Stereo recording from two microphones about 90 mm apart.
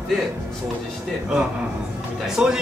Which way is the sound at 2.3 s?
5° right (ahead or behind).